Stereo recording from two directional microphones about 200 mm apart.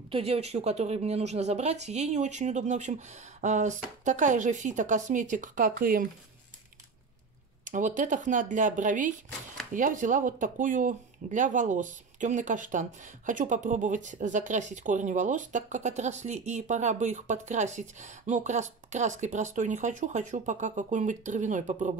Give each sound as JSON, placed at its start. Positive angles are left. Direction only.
{"t": 0.1, "sound": "speech", "side_deg": -30}
{"t": 7.6, "sound": "speech", "side_deg": -40}